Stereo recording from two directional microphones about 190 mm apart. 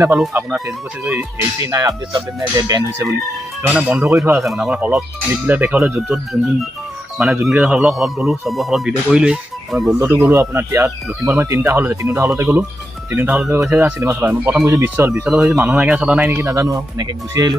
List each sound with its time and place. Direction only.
0.0 s speech: 10° right (ahead or behind)
3.6 s speech: 5° right (ahead or behind)
9.9 s speech: 15° right (ahead or behind)